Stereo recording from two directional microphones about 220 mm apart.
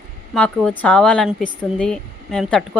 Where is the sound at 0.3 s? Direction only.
5° left (ahead or behind).